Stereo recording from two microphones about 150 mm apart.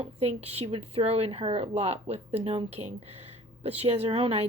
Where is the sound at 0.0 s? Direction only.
45° right (ahead or behind).